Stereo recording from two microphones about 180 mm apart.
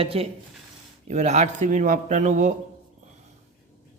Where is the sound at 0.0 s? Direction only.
30° right (ahead or behind).